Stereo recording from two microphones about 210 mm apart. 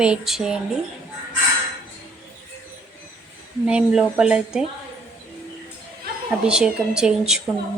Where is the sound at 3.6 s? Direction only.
5° right (ahead or behind).